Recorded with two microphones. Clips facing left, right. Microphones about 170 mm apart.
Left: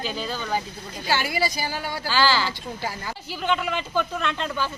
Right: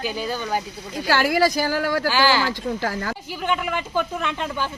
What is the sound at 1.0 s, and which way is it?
Speech, 90° right.